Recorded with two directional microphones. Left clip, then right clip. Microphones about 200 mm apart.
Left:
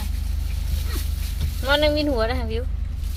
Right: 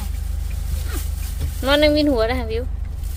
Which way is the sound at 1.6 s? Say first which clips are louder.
Right 4 dB; 25° right (ahead or behind).